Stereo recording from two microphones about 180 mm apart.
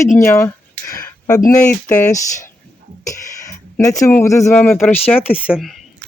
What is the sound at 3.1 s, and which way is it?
Speech, 15° left (ahead or behind).